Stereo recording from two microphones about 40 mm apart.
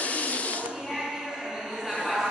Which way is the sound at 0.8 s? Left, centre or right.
Centre.